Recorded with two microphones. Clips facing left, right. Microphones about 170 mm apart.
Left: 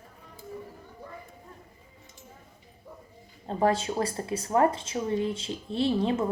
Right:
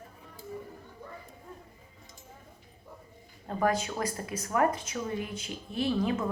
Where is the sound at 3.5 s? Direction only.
30° left (ahead or behind).